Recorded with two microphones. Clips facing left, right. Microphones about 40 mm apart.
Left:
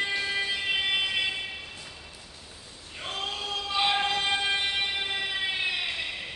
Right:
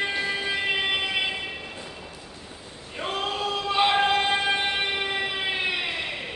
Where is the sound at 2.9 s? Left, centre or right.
Centre.